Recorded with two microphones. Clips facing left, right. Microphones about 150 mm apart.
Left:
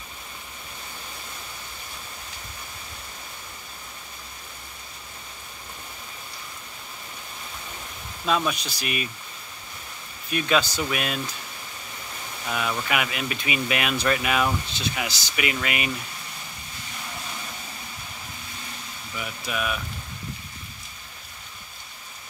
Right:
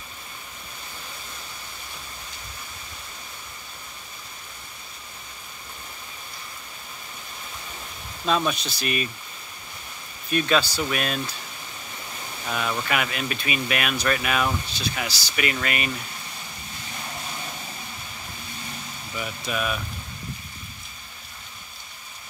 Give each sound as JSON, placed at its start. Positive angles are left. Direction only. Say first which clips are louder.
{"t": 8.3, "sound": "speech", "louder": "right 1 dB", "side_deg": 10}
{"t": 10.3, "sound": "speech", "louder": "right 1 dB", "side_deg": 15}
{"t": 12.4, "sound": "speech", "louder": "even", "side_deg": 0}
{"t": 19.1, "sound": "speech", "louder": "right 2 dB", "side_deg": 5}